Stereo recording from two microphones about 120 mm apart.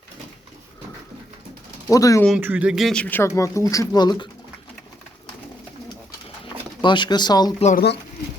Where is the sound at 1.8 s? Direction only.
30° left (ahead or behind).